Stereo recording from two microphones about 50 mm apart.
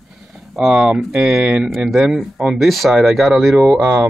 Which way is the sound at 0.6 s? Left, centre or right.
Centre.